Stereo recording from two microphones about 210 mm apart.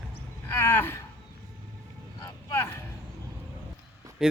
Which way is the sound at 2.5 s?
15° left (ahead or behind).